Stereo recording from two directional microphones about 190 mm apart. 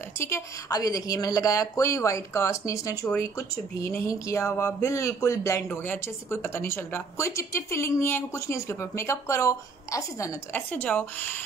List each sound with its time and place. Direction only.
0.2 s a woman's voice: 15° left (ahead or behind)